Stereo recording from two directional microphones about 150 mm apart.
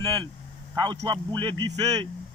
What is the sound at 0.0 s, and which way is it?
Vehicle, 30° right (ahead or behind).